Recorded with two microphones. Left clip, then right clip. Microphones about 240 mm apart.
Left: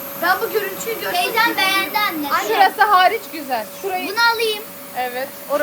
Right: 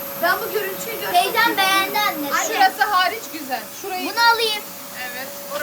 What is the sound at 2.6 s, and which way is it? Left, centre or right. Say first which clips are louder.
A woman's voice: left 4 dB; centre.